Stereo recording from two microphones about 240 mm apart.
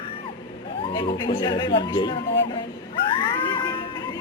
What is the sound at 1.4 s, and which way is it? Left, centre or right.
Speech, centre.